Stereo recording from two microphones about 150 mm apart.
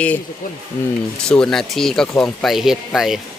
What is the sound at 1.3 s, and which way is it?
Speech, 5° left (ahead or behind).